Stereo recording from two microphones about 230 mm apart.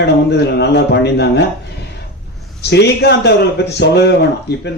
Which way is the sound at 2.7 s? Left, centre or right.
Left.